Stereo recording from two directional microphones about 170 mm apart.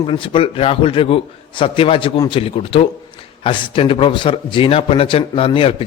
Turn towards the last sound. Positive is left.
turn(degrees=35)  # may be behind; listen again after turning